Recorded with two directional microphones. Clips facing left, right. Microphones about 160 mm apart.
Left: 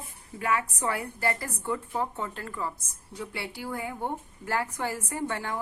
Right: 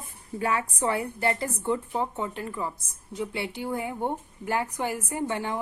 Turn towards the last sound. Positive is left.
turn(degrees=-20)  # may be behind; listen again after turning